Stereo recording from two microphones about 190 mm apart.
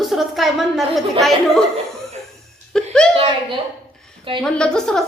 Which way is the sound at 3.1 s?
30° right (ahead or behind).